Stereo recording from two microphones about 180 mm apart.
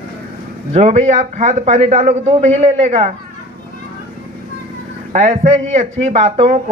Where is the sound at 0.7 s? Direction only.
35° right (ahead or behind).